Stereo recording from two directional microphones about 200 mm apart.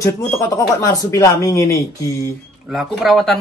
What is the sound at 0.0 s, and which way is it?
Speech, 15° left (ahead or behind).